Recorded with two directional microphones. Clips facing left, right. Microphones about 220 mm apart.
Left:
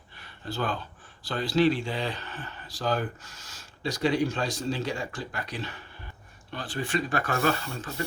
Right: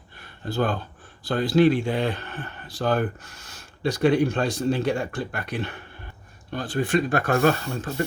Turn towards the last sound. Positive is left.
turn(degrees=-45)  # may be behind; listen again after turning